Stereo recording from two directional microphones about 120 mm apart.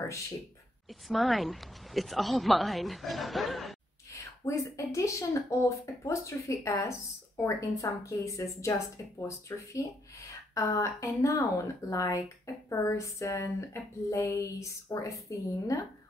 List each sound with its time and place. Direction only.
0.8 s a woman's voice: centre (ahead or behind)
4.1 s speech: 25° left (ahead or behind)